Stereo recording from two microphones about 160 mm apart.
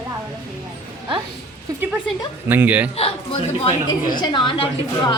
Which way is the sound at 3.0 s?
35° left (ahead or behind).